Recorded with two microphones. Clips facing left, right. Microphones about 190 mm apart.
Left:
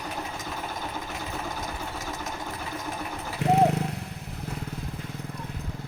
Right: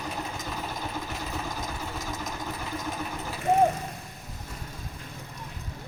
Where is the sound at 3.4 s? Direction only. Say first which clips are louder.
Left 1 dB; 75° left (ahead or behind).